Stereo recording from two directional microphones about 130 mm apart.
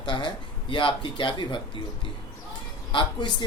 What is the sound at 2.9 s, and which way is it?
Speech, 40° left (ahead or behind).